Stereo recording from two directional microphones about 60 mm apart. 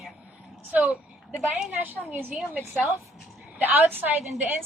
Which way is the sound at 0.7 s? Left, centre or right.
Right.